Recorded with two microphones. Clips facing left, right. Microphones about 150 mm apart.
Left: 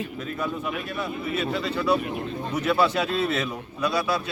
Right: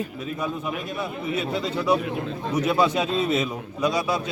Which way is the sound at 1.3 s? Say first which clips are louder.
Even; 15° right (ahead or behind).